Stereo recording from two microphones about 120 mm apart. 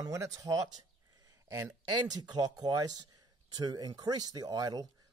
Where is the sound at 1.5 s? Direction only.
30° right (ahead or behind).